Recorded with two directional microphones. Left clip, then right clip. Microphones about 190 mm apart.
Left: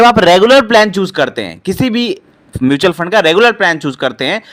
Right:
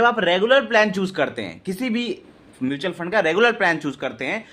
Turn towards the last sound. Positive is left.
turn(degrees=35)  # may be behind; listen again after turning